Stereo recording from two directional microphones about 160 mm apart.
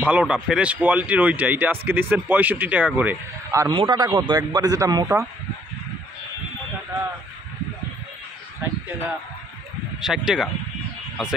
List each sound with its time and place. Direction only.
0.0 s speech: 10° right (ahead or behind)
3.7 s speech: 25° right (ahead or behind)
10.0 s speech: 5° right (ahead or behind)